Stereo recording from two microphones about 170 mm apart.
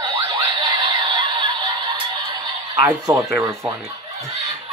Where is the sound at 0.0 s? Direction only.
30° right (ahead or behind).